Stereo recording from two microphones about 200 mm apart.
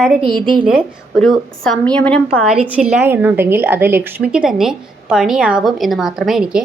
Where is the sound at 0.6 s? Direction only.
5° right (ahead or behind).